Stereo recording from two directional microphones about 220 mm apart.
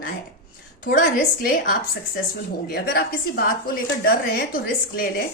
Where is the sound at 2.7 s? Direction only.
40° left (ahead or behind).